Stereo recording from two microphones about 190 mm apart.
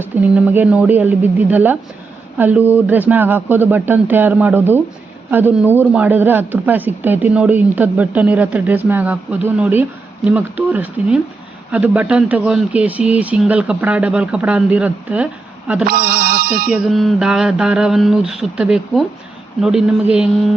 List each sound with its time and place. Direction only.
0.0 s a man's voice: 10° right (ahead or behind)
15.9 s speech: 50° right (ahead or behind)
16.7 s speech: centre (ahead or behind)